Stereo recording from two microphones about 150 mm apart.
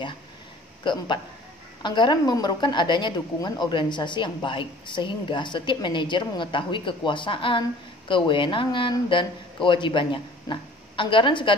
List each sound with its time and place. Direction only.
0.8 s a woman's voice: 30° left (ahead or behind)